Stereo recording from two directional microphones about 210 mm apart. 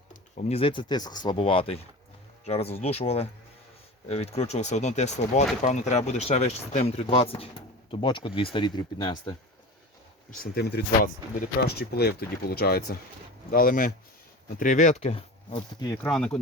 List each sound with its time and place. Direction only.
0.1 s speech: 30° left (ahead or behind)
10.4 s speech: 50° left (ahead or behind); by 15.9 s 30° left (ahead or behind)
16.0 s speech: 5° left (ahead or behind)